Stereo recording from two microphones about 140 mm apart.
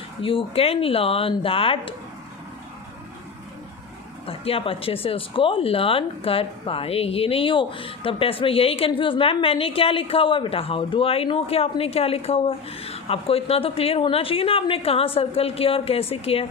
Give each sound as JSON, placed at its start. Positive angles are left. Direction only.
{"t": 0.2, "sound": "speech", "side_deg": 40}
{"t": 4.3, "sound": "speech", "side_deg": 40}